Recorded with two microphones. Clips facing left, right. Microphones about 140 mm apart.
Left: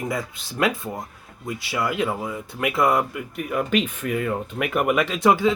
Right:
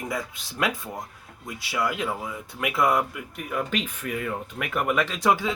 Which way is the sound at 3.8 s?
25° left (ahead or behind).